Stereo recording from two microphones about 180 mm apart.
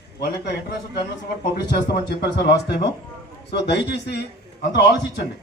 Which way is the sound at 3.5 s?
70° left (ahead or behind).